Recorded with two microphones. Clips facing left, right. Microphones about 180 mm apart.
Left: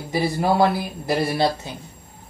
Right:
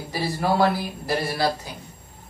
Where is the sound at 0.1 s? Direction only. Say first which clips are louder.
Left 3 dB; 20° left (ahead or behind).